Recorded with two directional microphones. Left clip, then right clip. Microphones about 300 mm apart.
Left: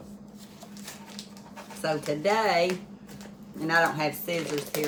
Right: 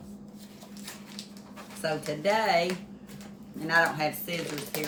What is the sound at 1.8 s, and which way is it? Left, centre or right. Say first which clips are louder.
Speech: left 2 dB; centre.